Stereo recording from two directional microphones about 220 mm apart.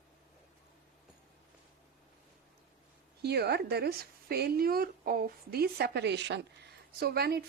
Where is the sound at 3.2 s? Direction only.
50° right (ahead or behind).